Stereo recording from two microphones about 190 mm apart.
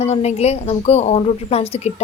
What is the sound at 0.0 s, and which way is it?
A woman's voice, 35° left (ahead or behind).